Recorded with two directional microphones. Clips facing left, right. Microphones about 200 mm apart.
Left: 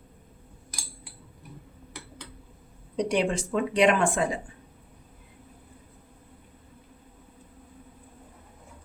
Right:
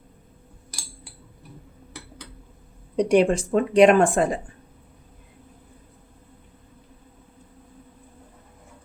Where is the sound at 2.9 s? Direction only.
50° right (ahead or behind).